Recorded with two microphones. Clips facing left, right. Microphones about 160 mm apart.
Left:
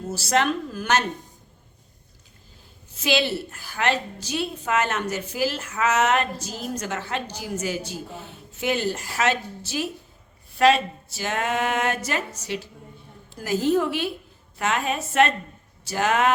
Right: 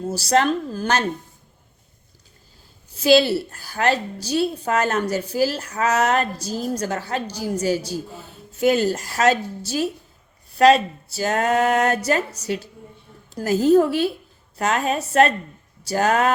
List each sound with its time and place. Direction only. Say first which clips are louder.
0.1 s a woman's voice: right 3 dB; 35° right (ahead or behind)
2.9 s a woman's voice: right 8 dB; 35° right (ahead or behind)